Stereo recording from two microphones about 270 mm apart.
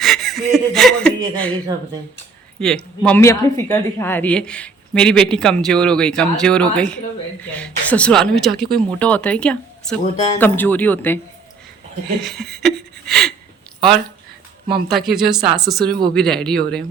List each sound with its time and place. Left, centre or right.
0.0 s speech: centre
2.6 s speech: centre
12.2 s a sound: centre
14.8 s speech: centre
15.4 s speech: centre
15.7 s speech: centre